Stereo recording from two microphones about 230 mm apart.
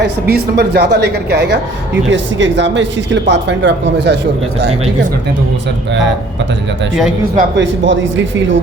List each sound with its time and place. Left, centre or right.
0.0 s speech: right
7.3 s speech: right